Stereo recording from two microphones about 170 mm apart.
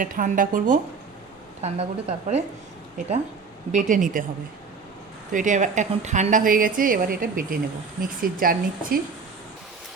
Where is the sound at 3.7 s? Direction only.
50° right (ahead or behind).